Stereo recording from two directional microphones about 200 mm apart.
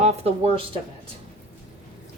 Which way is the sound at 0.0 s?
30° right (ahead or behind).